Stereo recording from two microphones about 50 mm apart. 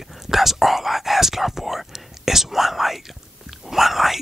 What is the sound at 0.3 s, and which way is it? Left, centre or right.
Whispering, centre.